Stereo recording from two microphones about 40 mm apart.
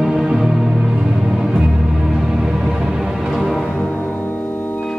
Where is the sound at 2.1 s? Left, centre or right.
Centre.